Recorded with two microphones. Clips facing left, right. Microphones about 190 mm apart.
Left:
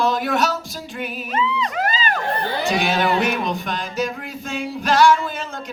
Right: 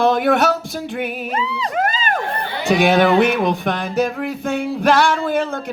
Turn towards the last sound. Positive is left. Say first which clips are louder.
# right 9 dB
turn(degrees=-55)  # may be behind; listen again after turning